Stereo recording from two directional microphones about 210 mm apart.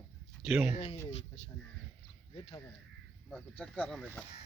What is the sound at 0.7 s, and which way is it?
Speech, 30° left (ahead or behind).